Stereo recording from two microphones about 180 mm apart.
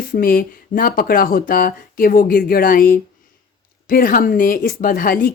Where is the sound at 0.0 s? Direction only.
50° left (ahead or behind).